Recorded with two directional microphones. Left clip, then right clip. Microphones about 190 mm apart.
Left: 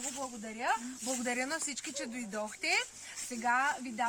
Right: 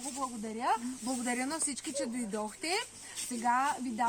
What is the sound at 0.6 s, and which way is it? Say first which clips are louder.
Speech: right 2 dB; 45° left (ahead or behind).